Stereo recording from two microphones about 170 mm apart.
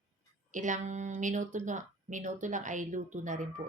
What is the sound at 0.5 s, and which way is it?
Speech, 45° right (ahead or behind).